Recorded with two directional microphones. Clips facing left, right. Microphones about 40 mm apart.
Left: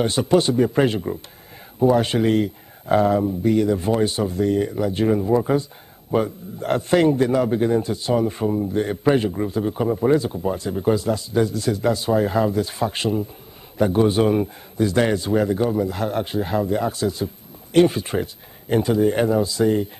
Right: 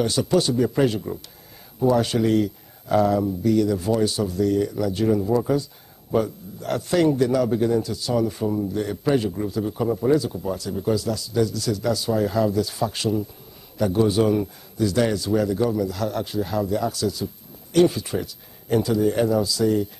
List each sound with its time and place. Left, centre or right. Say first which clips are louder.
0.0 s a man's voice: left 3 dB; left